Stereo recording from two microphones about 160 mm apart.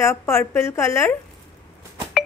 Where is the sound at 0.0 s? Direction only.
15° left (ahead or behind).